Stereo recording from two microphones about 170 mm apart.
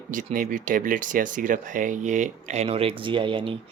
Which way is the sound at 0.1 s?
50° right (ahead or behind).